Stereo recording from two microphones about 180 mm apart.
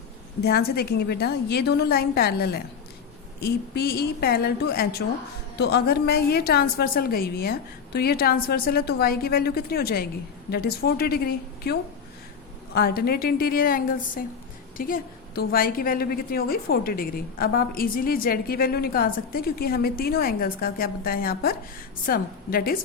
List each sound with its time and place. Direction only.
0.4 s a woman's voice: 60° left (ahead or behind)